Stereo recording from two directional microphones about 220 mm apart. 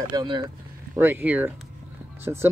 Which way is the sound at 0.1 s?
20° right (ahead or behind).